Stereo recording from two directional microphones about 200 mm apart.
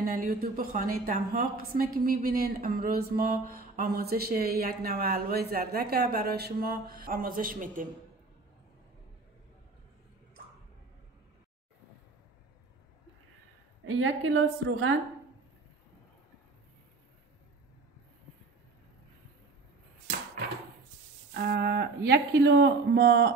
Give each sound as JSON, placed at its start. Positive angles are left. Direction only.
{"t": 0.0, "sound": "a woman's voice", "side_deg": -45}
{"t": 13.8, "sound": "a woman's voice", "side_deg": -70}
{"t": 21.3, "sound": "speech", "side_deg": -60}